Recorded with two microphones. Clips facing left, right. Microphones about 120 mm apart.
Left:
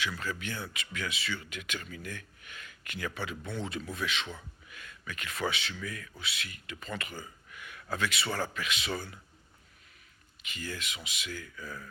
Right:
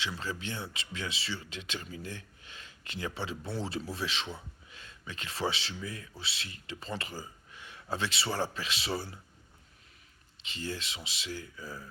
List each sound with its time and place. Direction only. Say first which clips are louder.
0.0 s speech: left 1 dB; 25° right (ahead or behind)
10.4 s speech: right 2 dB; 30° right (ahead or behind)